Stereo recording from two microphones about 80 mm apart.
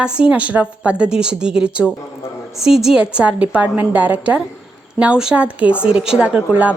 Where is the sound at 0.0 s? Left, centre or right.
Centre.